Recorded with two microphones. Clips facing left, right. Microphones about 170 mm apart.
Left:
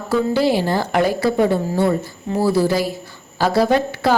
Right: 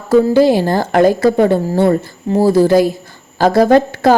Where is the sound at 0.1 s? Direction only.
45° right (ahead or behind).